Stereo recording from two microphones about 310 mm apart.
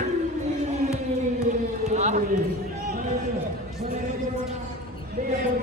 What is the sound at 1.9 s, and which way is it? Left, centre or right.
Run, right.